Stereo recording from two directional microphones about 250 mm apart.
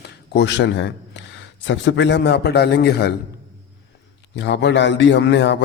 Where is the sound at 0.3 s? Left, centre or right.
Left.